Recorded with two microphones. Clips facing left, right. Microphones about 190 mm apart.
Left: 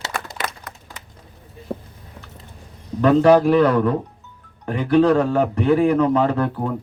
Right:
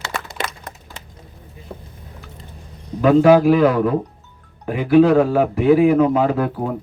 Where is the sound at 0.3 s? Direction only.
25° right (ahead or behind).